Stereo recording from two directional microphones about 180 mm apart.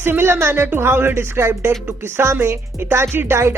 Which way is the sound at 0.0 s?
10° right (ahead or behind).